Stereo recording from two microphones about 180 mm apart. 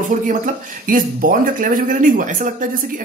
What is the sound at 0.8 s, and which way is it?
Speech, 50° right (ahead or behind).